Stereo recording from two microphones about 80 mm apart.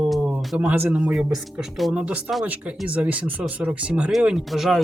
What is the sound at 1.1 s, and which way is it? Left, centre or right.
Speech, centre.